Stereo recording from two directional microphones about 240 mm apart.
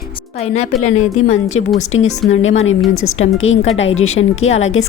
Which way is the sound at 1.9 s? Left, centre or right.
Left.